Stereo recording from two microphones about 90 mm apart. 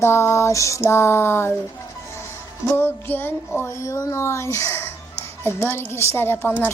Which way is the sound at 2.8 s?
20° left (ahead or behind).